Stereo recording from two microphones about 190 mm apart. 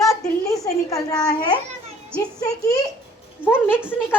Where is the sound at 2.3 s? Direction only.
20° left (ahead or behind).